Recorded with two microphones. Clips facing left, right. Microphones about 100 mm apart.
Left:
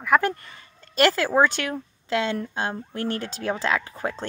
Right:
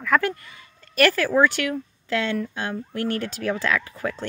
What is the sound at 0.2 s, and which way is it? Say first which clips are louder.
Speech: left 1 dB; 25° left (ahead or behind).